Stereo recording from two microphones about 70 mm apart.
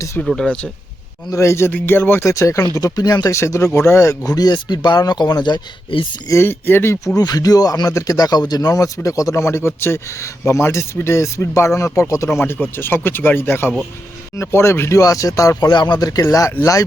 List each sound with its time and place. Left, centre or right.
0.3 s speech: centre
1.3 s speech: left
1.7 s speech: left
2.2 s speech: left
2.7 s speech: left
3.3 s speech: left
6.4 s speech: left
7.2 s speech: left
12.4 s speech: left
14.9 s speech: left
15.7 s speech: left
16.2 s speech: left